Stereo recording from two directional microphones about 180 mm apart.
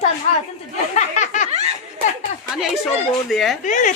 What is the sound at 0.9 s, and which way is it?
Speech, 40° left (ahead or behind).